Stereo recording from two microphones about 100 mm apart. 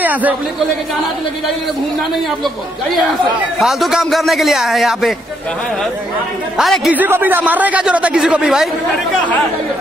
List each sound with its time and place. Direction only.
0.0 s speech: 15° right (ahead or behind)
3.5 s a man's voice: centre (ahead or behind)
6.5 s a man's voice: centre (ahead or behind)
6.9 s speech: 20° right (ahead or behind)